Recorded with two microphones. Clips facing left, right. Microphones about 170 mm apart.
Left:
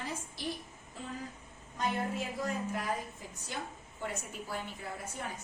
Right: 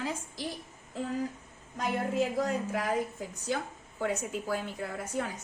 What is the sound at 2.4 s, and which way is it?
A woman's voice, 90° right.